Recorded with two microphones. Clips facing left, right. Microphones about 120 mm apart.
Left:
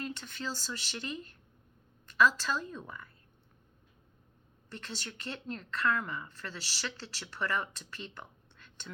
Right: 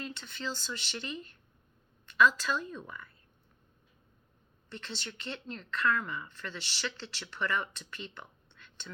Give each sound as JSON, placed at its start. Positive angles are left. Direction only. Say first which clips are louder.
{"t": 0.0, "sound": "a woman's voice", "louder": "left 1 dB", "side_deg": 45}
{"t": 4.7, "sound": "a woman's voice", "louder": "right 1 dB", "side_deg": 45}
{"t": 8.5, "sound": "a sound", "louder": "right 1 dB", "side_deg": 40}